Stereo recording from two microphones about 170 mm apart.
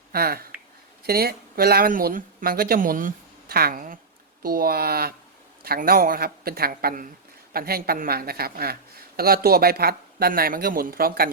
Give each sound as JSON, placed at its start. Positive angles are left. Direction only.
{"t": 0.1, "sound": "speech", "side_deg": -65}